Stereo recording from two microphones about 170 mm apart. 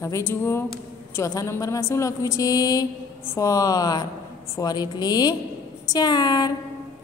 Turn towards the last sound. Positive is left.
turn(degrees=25)  # may be behind; listen again after turning